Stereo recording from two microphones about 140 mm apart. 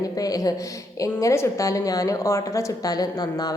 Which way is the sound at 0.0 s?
25° left (ahead or behind).